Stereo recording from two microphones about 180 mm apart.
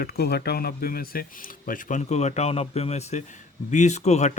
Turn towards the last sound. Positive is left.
turn(degrees=40)  # may be behind; listen again after turning